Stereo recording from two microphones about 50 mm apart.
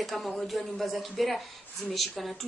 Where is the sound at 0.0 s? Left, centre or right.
Centre.